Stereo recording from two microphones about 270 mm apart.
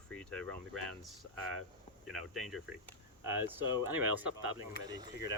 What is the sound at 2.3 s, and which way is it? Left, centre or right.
Speech, centre.